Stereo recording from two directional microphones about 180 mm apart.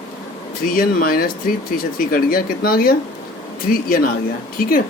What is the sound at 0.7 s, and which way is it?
Speech, 50° left (ahead or behind).